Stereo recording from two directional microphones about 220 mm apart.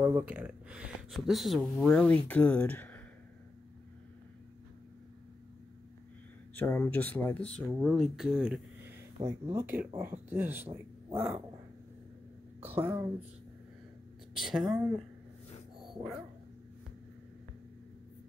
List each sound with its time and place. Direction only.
0.0 s speech: 10° right (ahead or behind); by 3.0 s 10° left (ahead or behind)
6.5 s speech: 10° left (ahead or behind); by 11.2 s 10° right (ahead or behind)
12.6 s speech: 10° right (ahead or behind)
14.3 s speech: centre (ahead or behind)